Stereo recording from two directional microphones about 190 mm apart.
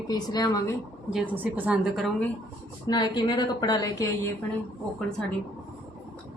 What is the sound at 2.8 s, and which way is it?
A woman's voice, 25° left (ahead or behind).